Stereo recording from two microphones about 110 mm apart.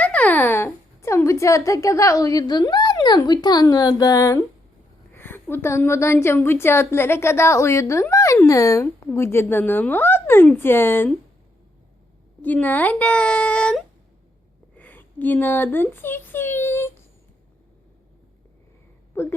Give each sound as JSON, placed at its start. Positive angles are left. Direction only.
{"t": 0.0, "sound": "speech", "side_deg": 10}
{"t": 5.1, "sound": "a woman's voice", "side_deg": 20}
{"t": 12.4, "sound": "speech", "side_deg": 15}
{"t": 14.8, "sound": "speech", "side_deg": 15}
{"t": 19.1, "sound": "a woman's voice", "side_deg": 20}